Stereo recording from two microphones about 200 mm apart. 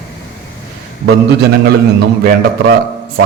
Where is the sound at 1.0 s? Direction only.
55° right (ahead or behind).